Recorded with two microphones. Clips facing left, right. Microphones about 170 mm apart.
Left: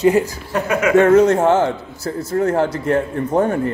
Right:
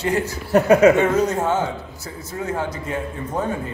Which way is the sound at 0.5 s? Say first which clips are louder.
Right 6 dB; 35° right (ahead or behind).